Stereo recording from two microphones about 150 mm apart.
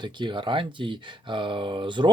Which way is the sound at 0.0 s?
30° right (ahead or behind).